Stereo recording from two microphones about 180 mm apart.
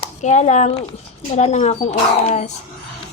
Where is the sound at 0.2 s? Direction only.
40° left (ahead or behind).